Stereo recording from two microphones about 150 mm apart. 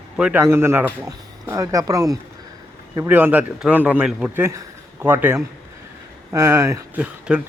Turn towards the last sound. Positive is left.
turn(degrees=-5)  # may be behind; listen again after turning